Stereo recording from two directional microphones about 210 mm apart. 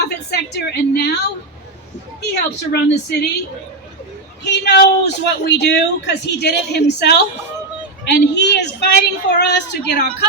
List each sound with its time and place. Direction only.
0.0 s a woman's voice: 55° left (ahead or behind)
2.3 s a man's voice: 50° left (ahead or behind)
4.4 s a man's voice: 55° left (ahead or behind)